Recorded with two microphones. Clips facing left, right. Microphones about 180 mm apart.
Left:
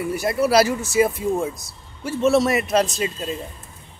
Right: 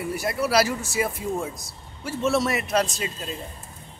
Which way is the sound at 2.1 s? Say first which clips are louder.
Left 5 dB; 20° left (ahead or behind).